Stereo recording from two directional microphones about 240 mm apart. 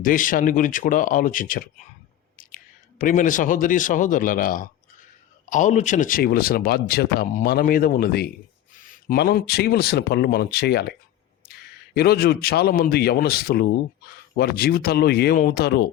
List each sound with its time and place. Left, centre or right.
0.0 s speech: left
3.0 s speech: left
11.9 s speech: left